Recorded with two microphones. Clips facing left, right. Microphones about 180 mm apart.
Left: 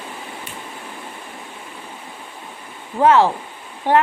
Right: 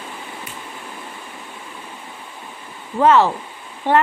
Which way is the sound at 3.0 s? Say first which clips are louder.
Even; 15° left (ahead or behind).